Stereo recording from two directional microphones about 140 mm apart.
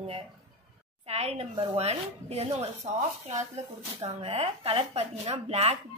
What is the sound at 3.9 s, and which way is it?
A woman's voice, 45° right (ahead or behind).